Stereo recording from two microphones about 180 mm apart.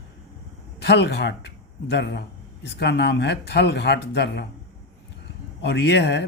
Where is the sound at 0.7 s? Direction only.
70° left (ahead or behind).